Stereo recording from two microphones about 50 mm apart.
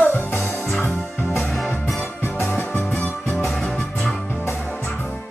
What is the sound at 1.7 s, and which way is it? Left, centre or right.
Music, centre.